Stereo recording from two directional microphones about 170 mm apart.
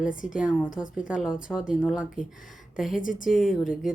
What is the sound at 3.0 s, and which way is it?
Speech, 50° left (ahead or behind).